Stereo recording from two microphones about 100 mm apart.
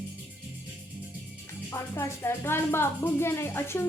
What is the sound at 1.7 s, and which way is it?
Speech, 25° left (ahead or behind).